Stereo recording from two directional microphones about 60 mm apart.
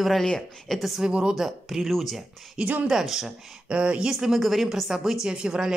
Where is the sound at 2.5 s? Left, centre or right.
Right.